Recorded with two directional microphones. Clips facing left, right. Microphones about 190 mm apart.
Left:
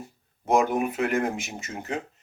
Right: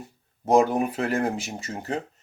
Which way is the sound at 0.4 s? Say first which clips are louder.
Right 3 dB; 35° right (ahead or behind).